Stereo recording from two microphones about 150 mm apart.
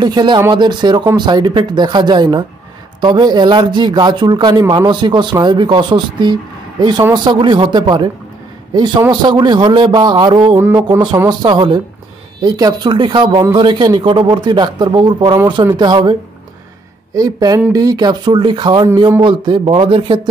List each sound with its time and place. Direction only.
0.0 s speech: 30° right (ahead or behind)
10.6 s music: 15° right (ahead or behind)
11.2 s speech: 30° right (ahead or behind)